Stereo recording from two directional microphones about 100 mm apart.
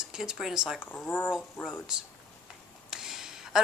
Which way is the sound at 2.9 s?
5° right (ahead or behind).